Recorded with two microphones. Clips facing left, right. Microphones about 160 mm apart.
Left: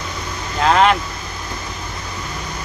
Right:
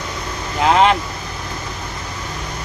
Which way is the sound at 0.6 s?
20° right (ahead or behind).